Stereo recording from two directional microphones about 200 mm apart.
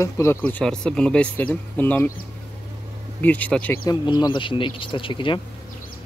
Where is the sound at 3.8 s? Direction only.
20° left (ahead or behind).